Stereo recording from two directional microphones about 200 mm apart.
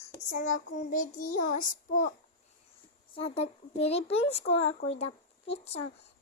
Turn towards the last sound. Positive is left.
turn(degrees=30)  # may be behind; listen again after turning